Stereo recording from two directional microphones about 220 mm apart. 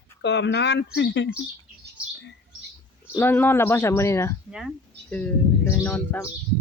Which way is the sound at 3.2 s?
10° left (ahead or behind).